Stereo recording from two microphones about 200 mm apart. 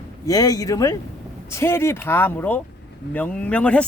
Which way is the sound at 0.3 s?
15° left (ahead or behind).